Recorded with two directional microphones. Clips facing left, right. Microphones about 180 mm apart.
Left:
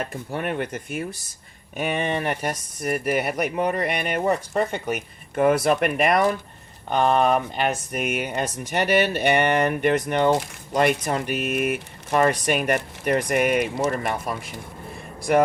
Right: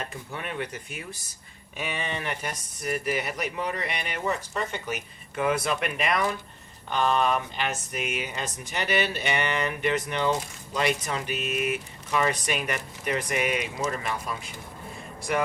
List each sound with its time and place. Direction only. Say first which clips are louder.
0.3 s speech: left 7 dB; 55° left (ahead or behind)